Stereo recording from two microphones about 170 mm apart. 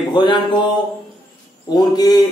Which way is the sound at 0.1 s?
30° left (ahead or behind).